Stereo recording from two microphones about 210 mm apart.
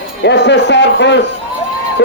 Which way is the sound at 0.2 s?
55° left (ahead or behind).